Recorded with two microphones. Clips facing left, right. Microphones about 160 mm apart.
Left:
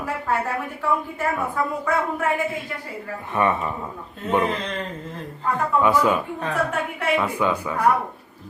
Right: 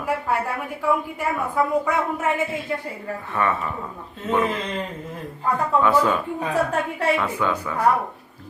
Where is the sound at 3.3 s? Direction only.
20° left (ahead or behind).